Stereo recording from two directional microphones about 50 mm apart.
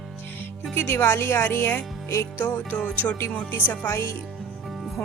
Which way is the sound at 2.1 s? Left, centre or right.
Left.